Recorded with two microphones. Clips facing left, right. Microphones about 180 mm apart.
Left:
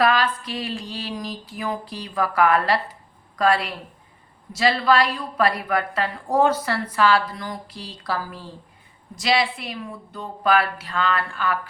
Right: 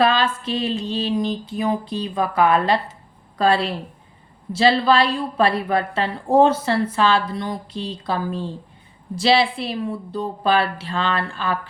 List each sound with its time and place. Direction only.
0.0 s a woman's voice: 25° right (ahead or behind)